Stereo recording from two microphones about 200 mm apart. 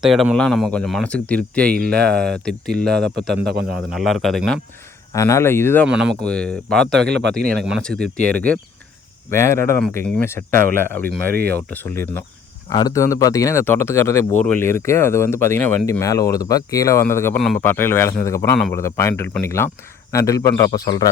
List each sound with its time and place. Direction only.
0.0 s speech: centre (ahead or behind)
1.7 s speech: 50° right (ahead or behind)
2.0 s speech: 5° left (ahead or behind)
5.1 s speech: 15° left (ahead or behind)
5.9 s speech: 5° right (ahead or behind); by 21.1 s 20° left (ahead or behind)